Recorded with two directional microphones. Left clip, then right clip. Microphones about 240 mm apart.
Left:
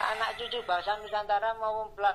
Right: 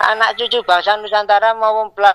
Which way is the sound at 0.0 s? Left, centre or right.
Right.